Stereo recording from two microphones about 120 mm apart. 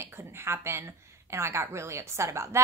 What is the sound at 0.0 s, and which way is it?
A woman's voice, 20° right (ahead or behind).